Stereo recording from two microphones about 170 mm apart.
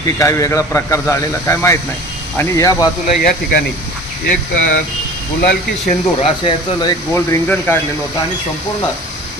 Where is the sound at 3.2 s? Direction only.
65° left (ahead or behind).